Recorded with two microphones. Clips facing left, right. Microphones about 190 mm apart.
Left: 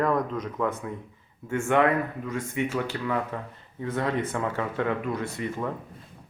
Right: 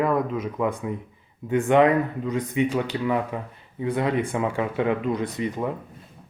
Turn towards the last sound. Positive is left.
turn(degrees=-15)  # may be behind; listen again after turning